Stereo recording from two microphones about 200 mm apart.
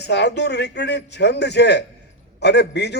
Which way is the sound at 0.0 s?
60° left (ahead or behind).